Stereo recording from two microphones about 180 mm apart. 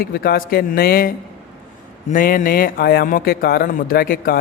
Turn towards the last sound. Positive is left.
turn(degrees=55)  # may be behind; listen again after turning